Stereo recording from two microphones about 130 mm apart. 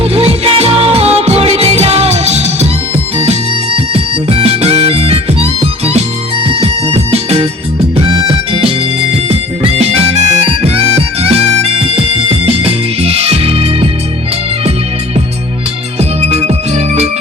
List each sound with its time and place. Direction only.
0.0 s music: 50° right (ahead or behind)
9.1 s harmonica: 50° right (ahead or behind)
16.0 s music: 55° right (ahead or behind)